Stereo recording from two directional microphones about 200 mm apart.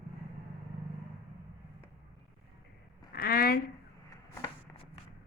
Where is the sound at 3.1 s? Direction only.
45° left (ahead or behind).